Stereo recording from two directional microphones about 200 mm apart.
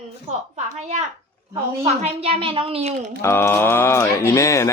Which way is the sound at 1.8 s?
30° right (ahead or behind).